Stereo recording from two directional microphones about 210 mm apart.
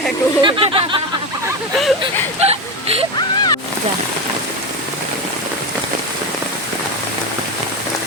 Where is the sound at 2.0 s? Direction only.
30° right (ahead or behind).